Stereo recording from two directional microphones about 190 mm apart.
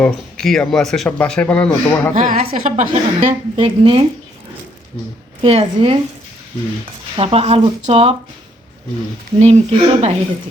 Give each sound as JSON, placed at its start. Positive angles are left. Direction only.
{"t": 0.0, "sound": "speech", "side_deg": 5}
{"t": 2.1, "sound": "a woman's voice", "side_deg": -45}
{"t": 3.2, "sound": "speech", "side_deg": -30}
{"t": 5.4, "sound": "speech", "side_deg": -30}
{"t": 7.2, "sound": "speech", "side_deg": -30}
{"t": 9.4, "sound": "speech", "side_deg": -35}